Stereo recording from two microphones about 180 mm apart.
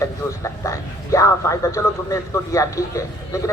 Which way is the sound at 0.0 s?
15° left (ahead or behind).